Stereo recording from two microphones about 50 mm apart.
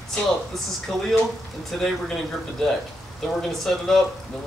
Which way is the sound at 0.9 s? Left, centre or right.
Centre.